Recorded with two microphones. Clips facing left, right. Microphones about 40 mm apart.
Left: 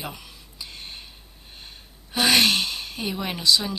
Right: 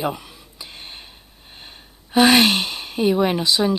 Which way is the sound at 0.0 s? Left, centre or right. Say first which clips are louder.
Right 11 dB; centre.